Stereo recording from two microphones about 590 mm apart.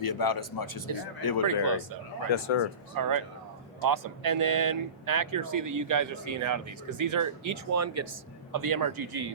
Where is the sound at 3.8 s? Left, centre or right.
Right.